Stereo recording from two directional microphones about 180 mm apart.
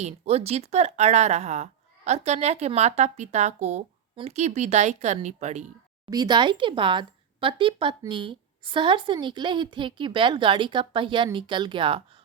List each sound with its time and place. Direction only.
0.0 s speech: 35° right (ahead or behind)
6.1 s speech: 25° right (ahead or behind)